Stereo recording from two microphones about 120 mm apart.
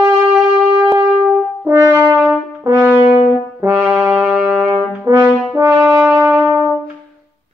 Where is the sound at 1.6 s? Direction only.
20° right (ahead or behind).